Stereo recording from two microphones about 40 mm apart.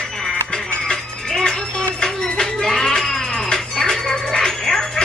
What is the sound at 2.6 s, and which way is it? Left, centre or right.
Cat, centre.